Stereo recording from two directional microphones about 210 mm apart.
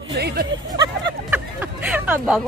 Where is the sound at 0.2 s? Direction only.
50° right (ahead or behind).